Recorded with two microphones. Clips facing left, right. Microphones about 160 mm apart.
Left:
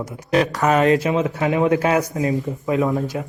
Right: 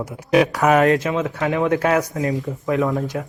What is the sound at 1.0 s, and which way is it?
Speech, 15° left (ahead or behind).